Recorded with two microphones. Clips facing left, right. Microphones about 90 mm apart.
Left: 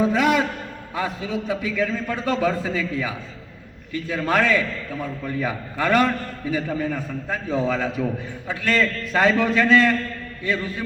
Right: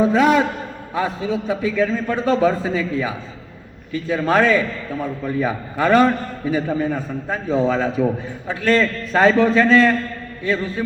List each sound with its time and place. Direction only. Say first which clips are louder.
0.0 s a man's voice: right 4 dB; 30° right (ahead or behind)
5.8 s a man's voice: right 5 dB; 30° right (ahead or behind)